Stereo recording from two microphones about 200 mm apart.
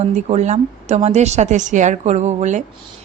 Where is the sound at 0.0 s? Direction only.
35° right (ahead or behind).